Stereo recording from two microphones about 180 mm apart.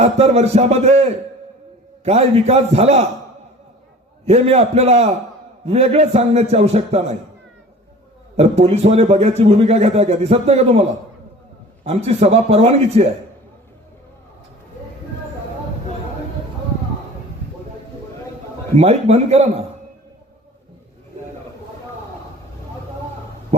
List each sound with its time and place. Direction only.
0.0 s a man's voice: 35° right (ahead or behind)
4.3 s a man's voice: 35° right (ahead or behind)
8.4 s a man's voice: 35° right (ahead or behind)
11.9 s a man's voice: 35° right (ahead or behind)
18.8 s a man's voice: 35° right (ahead or behind)